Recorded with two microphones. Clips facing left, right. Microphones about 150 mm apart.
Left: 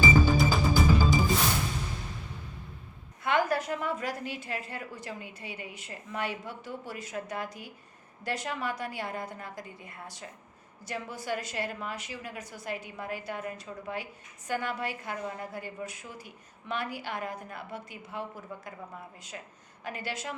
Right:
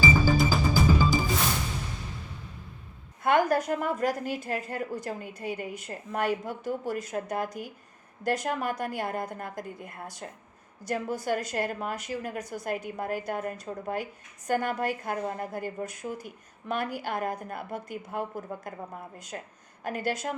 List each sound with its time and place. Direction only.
0.3 s music: centre (ahead or behind)
3.2 s a woman's voice: 45° right (ahead or behind)